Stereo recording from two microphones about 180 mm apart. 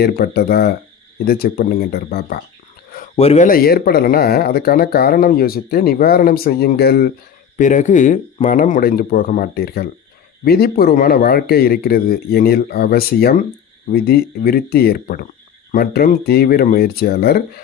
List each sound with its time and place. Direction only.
0.0 s speech: 55° left (ahead or behind)
3.2 s speech: 35° left (ahead or behind); by 7.1 s 60° left (ahead or behind)
7.6 s speech: 45° left (ahead or behind); by 17.4 s 60° left (ahead or behind)